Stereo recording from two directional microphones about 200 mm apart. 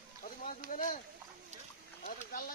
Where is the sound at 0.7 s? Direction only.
40° left (ahead or behind).